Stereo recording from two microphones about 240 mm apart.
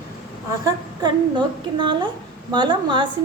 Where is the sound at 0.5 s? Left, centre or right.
Centre.